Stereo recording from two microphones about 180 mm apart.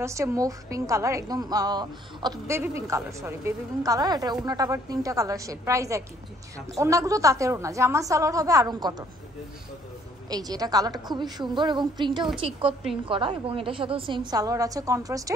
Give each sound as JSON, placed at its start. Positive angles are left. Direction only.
{"t": 0.0, "sound": "a woman's voice", "side_deg": -15}
{"t": 10.3, "sound": "a woman's voice", "side_deg": -20}